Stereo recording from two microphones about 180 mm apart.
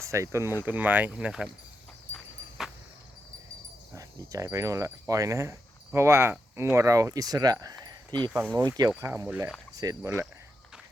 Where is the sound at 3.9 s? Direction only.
15° right (ahead or behind).